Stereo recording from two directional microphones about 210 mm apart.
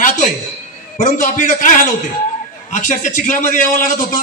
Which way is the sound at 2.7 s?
35° left (ahead or behind).